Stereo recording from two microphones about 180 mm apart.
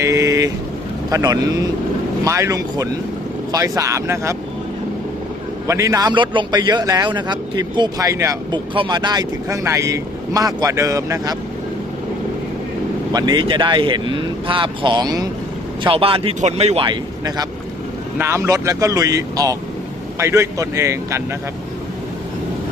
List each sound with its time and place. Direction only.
0.0 s vehicle: 15° right (ahead or behind)
1.1 s a man's voice: 20° right (ahead or behind)
5.6 s a man's voice: 15° right (ahead or behind)
13.1 s a man's voice: 25° right (ahead or behind)